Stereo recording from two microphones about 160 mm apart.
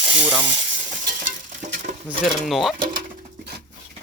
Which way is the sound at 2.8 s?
90° right.